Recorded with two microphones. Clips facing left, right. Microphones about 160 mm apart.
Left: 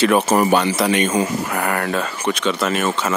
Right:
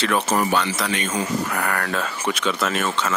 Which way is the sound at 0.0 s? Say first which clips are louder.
Left 6 dB; 10° left (ahead or behind).